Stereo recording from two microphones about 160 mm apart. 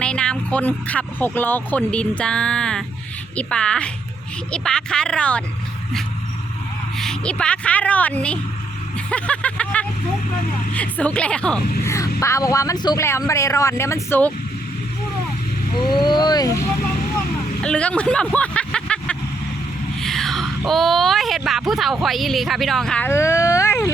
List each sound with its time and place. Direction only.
0.0 s speech: 5° left (ahead or behind)
6.9 s speech: 5° left (ahead or behind)
11.9 s speech: 20° left (ahead or behind)
15.8 s speech: 30° left (ahead or behind)
17.6 s speech: 5° left (ahead or behind)